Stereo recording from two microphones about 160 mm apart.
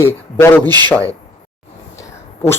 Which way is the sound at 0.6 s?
25° right (ahead or behind).